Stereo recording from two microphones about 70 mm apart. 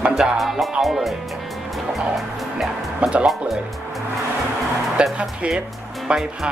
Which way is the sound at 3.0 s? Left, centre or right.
Centre.